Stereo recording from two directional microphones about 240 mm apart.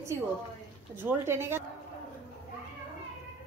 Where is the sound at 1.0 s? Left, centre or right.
Centre.